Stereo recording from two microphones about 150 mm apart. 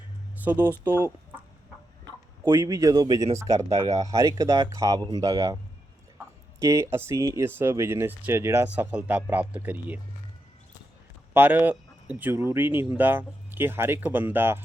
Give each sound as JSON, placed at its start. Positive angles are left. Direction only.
{"t": 0.5, "sound": "speech", "side_deg": -15}
{"t": 2.4, "sound": "speech", "side_deg": -20}
{"t": 6.6, "sound": "speech", "side_deg": -20}
{"t": 11.3, "sound": "speech", "side_deg": -10}